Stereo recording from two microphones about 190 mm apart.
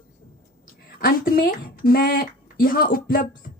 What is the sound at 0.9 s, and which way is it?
A woman's voice, 50° left (ahead or behind).